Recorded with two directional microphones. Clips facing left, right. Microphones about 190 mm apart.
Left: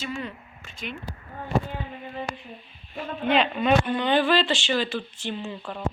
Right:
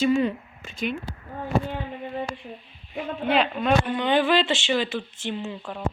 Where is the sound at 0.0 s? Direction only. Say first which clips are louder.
Right 12 dB; 20° right (ahead or behind).